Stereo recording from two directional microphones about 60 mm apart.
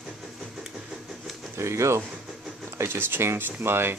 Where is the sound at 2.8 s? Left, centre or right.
Right.